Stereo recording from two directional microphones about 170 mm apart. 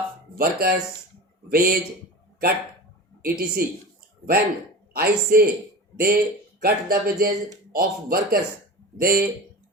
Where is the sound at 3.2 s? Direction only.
60° right (ahead or behind).